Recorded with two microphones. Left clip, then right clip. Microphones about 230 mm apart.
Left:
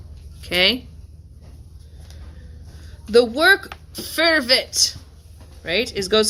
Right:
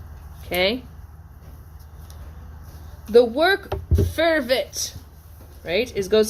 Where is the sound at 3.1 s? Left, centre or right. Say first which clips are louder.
Left 2 dB; left.